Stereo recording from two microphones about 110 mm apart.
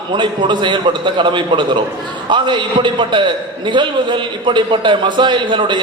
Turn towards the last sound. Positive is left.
turn(degrees=-45)  # may be behind; listen again after turning